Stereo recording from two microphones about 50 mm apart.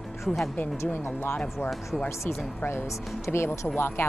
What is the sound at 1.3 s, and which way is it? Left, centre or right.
Speech, left.